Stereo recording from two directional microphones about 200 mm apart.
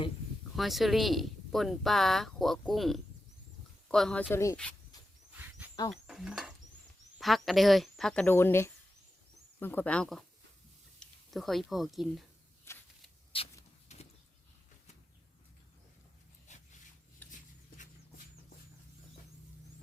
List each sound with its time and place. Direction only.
0.5 s speech: centre (ahead or behind)
5.4 s a sound: 5° right (ahead or behind)
5.9 s speech: 5° right (ahead or behind)
12.7 s shuffling cards: 15° left (ahead or behind)
13.3 s a sound: 25° left (ahead or behind)
16.5 s zipper: 35° left (ahead or behind)